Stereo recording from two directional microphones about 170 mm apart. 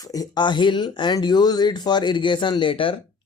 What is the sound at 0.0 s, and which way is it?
Speech, 20° left (ahead or behind).